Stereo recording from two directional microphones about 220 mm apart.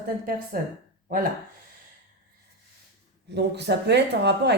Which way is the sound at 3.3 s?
50° right (ahead or behind).